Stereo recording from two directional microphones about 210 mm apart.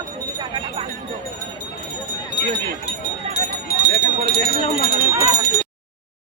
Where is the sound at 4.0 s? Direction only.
35° right (ahead or behind).